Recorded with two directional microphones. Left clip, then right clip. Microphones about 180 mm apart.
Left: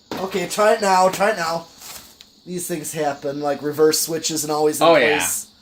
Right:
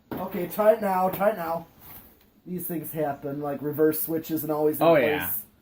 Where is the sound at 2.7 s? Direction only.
35° left (ahead or behind).